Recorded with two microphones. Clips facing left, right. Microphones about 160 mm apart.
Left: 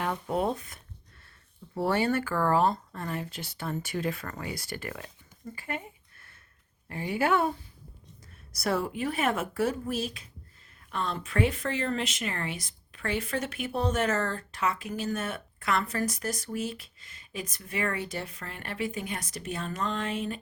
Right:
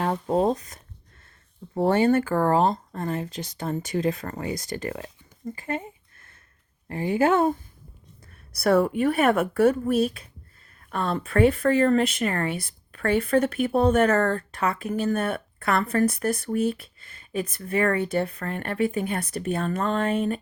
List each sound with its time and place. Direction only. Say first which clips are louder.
0.0 s speech: right 6 dB; 30° right (ahead or behind)
6.8 s speech: right 6 dB; 35° right (ahead or behind)
8.5 s speech: right 9 dB; 60° right (ahead or behind)